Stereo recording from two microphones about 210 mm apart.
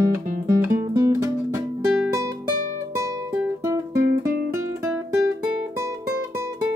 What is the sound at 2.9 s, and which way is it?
Guitar, 15° right (ahead or behind).